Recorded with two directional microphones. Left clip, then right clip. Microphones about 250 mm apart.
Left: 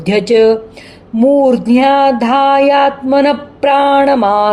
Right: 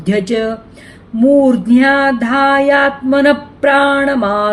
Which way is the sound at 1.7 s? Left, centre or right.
Centre.